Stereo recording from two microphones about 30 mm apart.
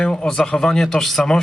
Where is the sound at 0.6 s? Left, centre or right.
Left.